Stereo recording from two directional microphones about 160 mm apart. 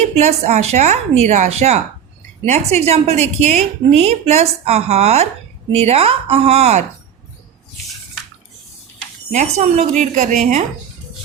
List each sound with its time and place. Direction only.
0.0 s a woman's voice: 40° right (ahead or behind)
9.3 s speech: 45° right (ahead or behind)